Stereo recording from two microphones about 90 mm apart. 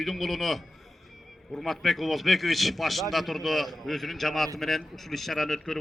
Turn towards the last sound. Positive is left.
turn(degrees=5)  # may be behind; listen again after turning